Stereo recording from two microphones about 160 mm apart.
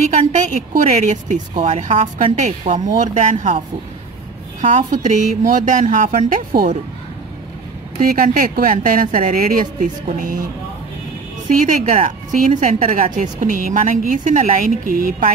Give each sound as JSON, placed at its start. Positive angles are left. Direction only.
{"t": 0.3, "sound": "a woman's voice", "side_deg": -50}
{"t": 1.5, "sound": "a woman's voice", "side_deg": -40}
{"t": 8.0, "sound": "a woman's voice", "side_deg": -60}
{"t": 11.4, "sound": "a woman's voice", "side_deg": -55}